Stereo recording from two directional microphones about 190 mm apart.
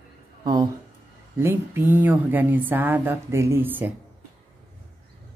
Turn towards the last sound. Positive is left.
turn(degrees=-10)  # may be behind; listen again after turning